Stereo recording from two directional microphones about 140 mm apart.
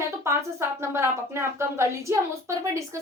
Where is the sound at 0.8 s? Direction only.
20° right (ahead or behind).